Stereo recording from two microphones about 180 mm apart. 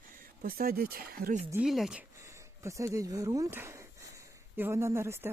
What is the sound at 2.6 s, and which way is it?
Speech, 15° right (ahead or behind).